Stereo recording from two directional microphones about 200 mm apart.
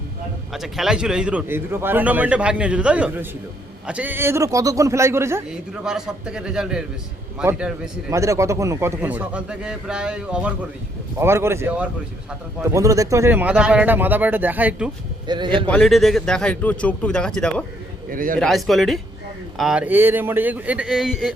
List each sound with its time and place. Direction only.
0.5 s a man's voice: centre (ahead or behind)
12.7 s a man's voice: 15° right (ahead or behind)
15.3 s a man's voice: 25° right (ahead or behind)
15.6 s a man's voice: 5° left (ahead or behind)
18.1 s a man's voice: 45° right (ahead or behind)
18.3 s a man's voice: centre (ahead or behind)